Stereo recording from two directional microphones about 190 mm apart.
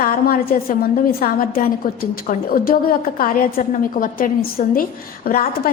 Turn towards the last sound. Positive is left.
turn(degrees=50)  # may be behind; listen again after turning